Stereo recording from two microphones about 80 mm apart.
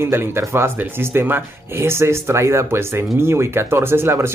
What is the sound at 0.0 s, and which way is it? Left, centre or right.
Speech, right.